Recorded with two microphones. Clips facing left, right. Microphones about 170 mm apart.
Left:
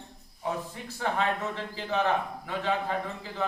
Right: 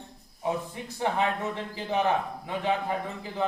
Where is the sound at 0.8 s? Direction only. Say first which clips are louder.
Right 1 dB; 20° right (ahead or behind).